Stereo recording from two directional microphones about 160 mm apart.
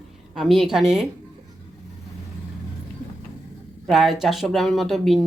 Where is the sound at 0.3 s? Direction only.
Centre (ahead or behind).